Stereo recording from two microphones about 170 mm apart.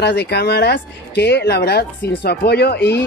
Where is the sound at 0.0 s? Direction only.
75° left (ahead or behind).